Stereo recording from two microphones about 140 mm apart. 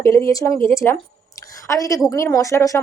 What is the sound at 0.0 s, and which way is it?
Speech, 20° left (ahead or behind).